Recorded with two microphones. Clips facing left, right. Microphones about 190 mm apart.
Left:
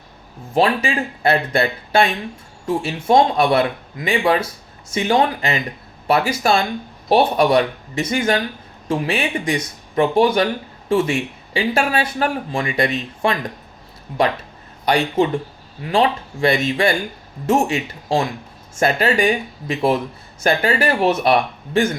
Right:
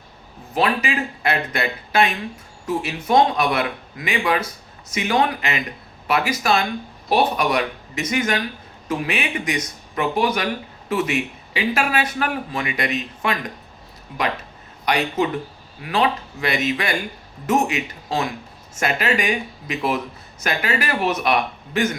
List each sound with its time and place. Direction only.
0.5 s speech: 30° left (ahead or behind)
14.8 s speech: 30° left (ahead or behind)